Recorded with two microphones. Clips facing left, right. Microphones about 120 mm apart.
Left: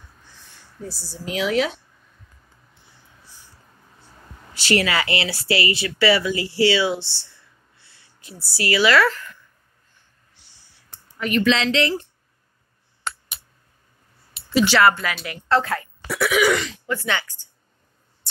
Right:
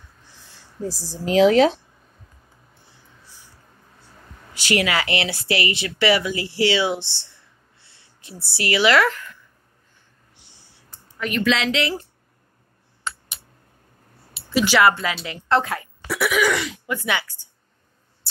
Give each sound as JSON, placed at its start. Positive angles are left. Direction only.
{"t": 1.1, "sound": "speech", "side_deg": -35}
{"t": 4.6, "sound": "speech", "side_deg": -15}
{"t": 11.1, "sound": "speech", "side_deg": 0}
{"t": 14.5, "sound": "speech", "side_deg": -10}
{"t": 14.9, "sound": "speech", "side_deg": -25}
{"t": 16.1, "sound": "speech", "side_deg": 0}
{"t": 16.6, "sound": "speech", "side_deg": -15}